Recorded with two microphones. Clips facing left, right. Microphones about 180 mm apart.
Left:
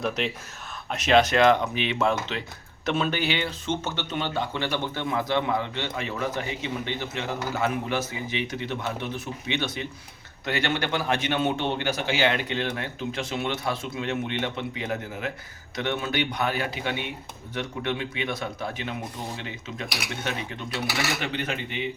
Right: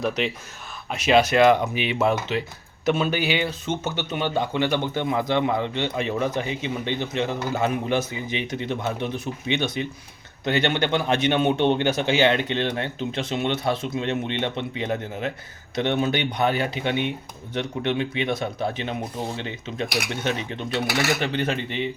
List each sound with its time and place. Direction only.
0.9 s speech: 5° right (ahead or behind); by 21.8 s 30° right (ahead or behind)